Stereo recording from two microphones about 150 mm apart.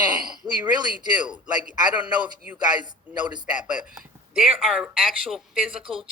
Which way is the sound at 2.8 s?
30° right (ahead or behind).